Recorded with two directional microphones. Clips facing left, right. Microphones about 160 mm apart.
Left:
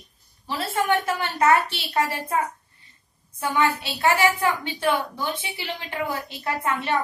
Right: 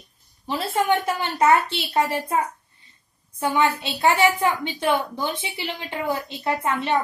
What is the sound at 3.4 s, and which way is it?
A woman's voice, 20° right (ahead or behind).